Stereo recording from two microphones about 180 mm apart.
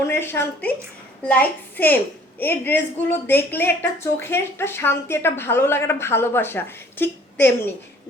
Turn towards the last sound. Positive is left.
turn(degrees=10)  # may be behind; listen again after turning